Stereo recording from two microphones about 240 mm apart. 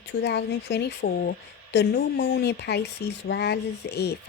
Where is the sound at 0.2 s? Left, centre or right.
Left.